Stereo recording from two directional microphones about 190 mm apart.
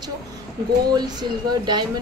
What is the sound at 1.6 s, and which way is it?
Speech, 25° right (ahead or behind).